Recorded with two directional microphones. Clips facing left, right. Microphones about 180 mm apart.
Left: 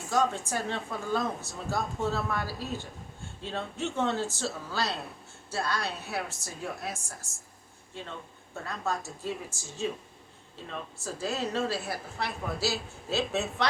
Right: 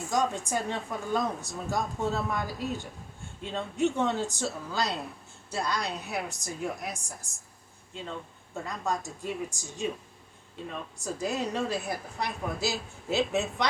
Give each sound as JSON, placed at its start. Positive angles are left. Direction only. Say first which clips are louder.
{"t": 0.1, "sound": "a woman's voice", "louder": "left 1 dB", "side_deg": -15}
{"t": 8.6, "sound": "a woman's voice", "louder": "right 1 dB", "side_deg": -15}
{"t": 10.9, "sound": "a woman's voice", "louder": "right 2 dB", "side_deg": -15}